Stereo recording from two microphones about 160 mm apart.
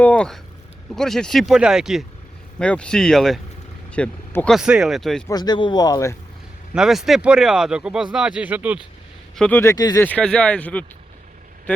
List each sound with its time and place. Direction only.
0.0 s a sound: 5° left (ahead or behind)
0.9 s speech: 5° left (ahead or behind)
4.5 s speech: 5° right (ahead or behind)
5.3 s speech: 25° left (ahead or behind)
6.7 s speech: centre (ahead or behind)
9.3 s speech: 10° left (ahead or behind)
10.0 s speech: 10° left (ahead or behind)